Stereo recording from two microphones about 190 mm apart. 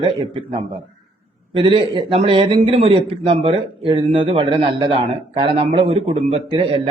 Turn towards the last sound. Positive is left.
turn(degrees=-25)  # may be behind; listen again after turning